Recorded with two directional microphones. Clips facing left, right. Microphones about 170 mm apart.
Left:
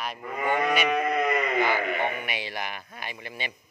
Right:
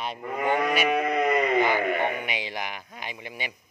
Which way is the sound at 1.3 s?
20° right (ahead or behind).